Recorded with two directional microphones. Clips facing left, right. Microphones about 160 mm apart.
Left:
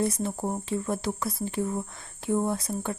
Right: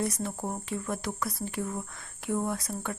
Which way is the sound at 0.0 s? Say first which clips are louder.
Left 4 dB; 30° left (ahead or behind).